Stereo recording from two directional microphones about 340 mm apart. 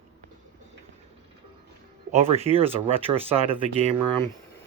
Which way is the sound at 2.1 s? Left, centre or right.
Centre.